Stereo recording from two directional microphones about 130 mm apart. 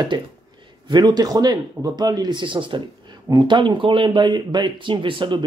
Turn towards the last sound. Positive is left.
turn(degrees=-40)  # may be behind; listen again after turning